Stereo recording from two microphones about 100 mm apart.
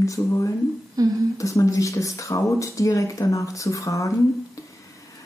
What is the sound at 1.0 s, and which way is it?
Speech, 35° right (ahead or behind).